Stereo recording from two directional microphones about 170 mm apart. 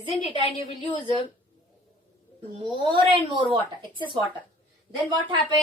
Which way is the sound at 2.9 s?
30° right (ahead or behind).